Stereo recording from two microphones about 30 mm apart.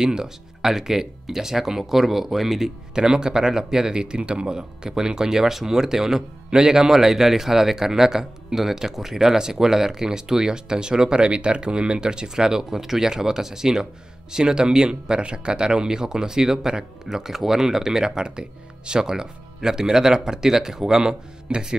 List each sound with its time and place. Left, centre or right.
0.0 s speech: centre
2.9 s speech: right
18.2 s speech: right
18.9 s speech: centre